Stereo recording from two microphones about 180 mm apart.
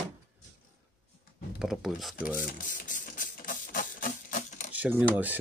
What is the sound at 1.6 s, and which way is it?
Speech, centre (ahead or behind).